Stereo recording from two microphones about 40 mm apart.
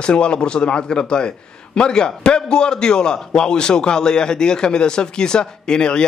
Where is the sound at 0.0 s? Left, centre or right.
Left.